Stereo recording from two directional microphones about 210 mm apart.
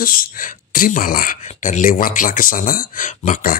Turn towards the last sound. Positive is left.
turn(degrees=40)  # may be behind; listen again after turning